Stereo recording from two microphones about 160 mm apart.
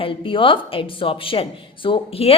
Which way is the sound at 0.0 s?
30° left (ahead or behind).